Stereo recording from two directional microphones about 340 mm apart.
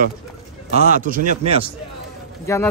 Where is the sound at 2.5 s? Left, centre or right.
Centre.